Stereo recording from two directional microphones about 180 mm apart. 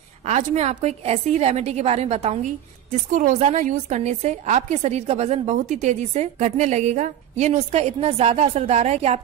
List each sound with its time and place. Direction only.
0.2 s a woman's voice: 35° right (ahead or behind)